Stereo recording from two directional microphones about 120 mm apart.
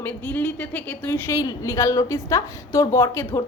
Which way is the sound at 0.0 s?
15° left (ahead or behind).